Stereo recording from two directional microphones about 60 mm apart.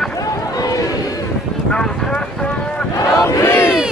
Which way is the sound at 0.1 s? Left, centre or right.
Left.